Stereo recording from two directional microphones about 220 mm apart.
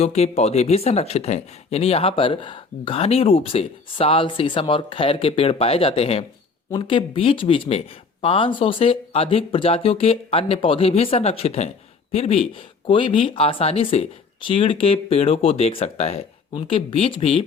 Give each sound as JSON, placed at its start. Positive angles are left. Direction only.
{"t": 0.0, "sound": "speech", "side_deg": 30}